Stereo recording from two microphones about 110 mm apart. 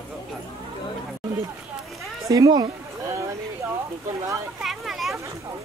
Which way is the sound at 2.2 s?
30° right (ahead or behind).